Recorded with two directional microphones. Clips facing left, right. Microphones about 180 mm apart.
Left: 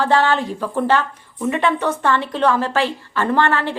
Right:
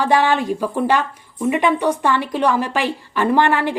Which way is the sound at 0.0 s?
15° right (ahead or behind).